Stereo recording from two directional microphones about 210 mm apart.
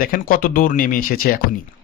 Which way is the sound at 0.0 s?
45° left (ahead or behind).